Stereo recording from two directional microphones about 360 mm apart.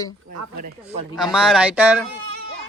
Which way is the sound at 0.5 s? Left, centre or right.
Right.